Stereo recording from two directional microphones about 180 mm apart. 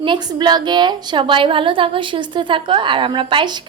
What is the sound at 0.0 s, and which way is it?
A woman's voice, 25° right (ahead or behind).